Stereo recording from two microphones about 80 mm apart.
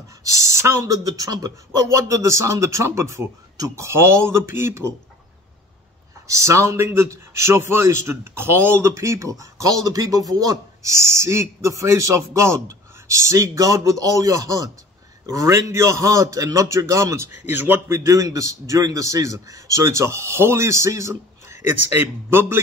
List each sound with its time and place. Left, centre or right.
0.2 s a man's voice: right
0.9 s speech: right
2.0 s a man's voice: right
6.2 s a man's voice: right
17.5 s a man's voice: right